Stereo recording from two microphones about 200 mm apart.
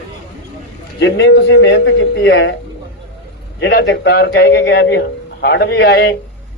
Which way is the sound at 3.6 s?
60° left (ahead or behind).